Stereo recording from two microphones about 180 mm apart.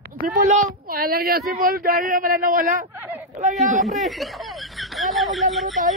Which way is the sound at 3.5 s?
Centre (ahead or behind).